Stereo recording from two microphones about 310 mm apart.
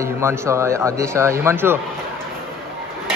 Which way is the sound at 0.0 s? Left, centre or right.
Centre.